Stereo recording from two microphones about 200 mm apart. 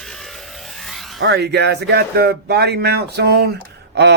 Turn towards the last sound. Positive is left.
turn(degrees=-55)  # may be behind; listen again after turning